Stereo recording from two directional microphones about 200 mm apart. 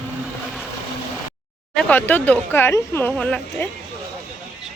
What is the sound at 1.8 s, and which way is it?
Speech, 10° left (ahead or behind).